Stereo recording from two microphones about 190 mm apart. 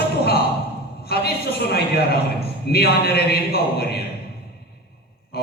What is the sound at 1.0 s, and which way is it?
A woman's voice, 55° left (ahead or behind).